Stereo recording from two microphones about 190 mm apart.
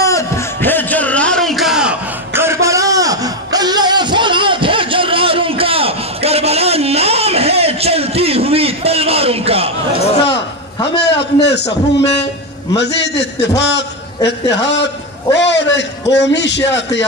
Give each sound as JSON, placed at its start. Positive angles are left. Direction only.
{"t": 0.0, "sound": "a sound", "side_deg": 15}
{"t": 11.0, "sound": "a man's voice", "side_deg": 65}
{"t": 12.7, "sound": "a man's voice", "side_deg": 65}